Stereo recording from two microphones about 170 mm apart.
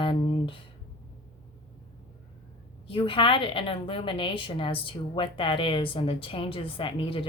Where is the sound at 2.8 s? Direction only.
30° left (ahead or behind).